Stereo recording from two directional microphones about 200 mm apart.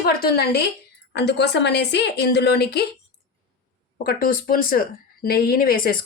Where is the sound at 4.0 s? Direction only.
45° left (ahead or behind).